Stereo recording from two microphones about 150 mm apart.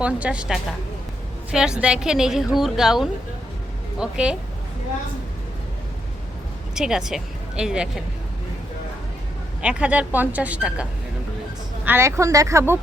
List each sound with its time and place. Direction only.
0.0 s a woman's voice: 10° right (ahead or behind)
6.7 s speech: 5° right (ahead or behind)
9.6 s speech: 10° right (ahead or behind)
11.9 s a woman's voice: 15° right (ahead or behind)